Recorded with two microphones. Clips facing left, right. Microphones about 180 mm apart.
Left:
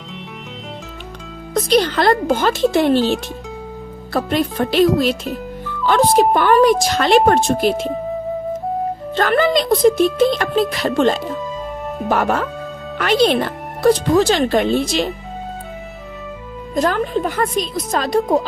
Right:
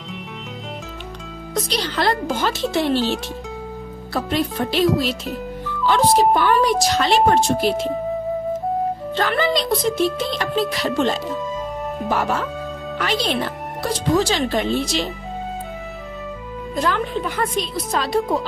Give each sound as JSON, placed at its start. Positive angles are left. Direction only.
{"t": 1.5, "sound": "speech", "side_deg": 50}
{"t": 4.3, "sound": "speech", "side_deg": 55}
{"t": 5.2, "sound": "music", "side_deg": 0}
{"t": 5.8, "sound": "speech", "side_deg": 55}
{"t": 9.1, "sound": "speech", "side_deg": 50}
{"t": 16.7, "sound": "speech", "side_deg": 45}